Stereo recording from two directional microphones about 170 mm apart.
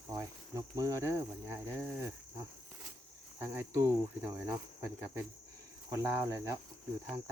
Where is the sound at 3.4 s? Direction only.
15° right (ahead or behind).